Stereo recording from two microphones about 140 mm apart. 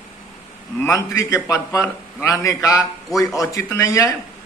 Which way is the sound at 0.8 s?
25° left (ahead or behind).